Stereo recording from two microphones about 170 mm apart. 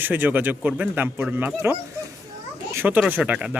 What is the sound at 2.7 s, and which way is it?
Speech, 10° right (ahead or behind).